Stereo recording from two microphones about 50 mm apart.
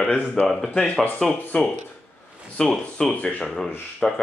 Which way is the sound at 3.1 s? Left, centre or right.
Left.